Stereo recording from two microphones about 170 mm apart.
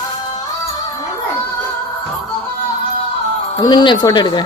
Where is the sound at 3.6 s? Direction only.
25° left (ahead or behind).